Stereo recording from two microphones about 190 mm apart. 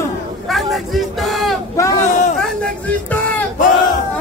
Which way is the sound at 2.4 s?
5° left (ahead or behind).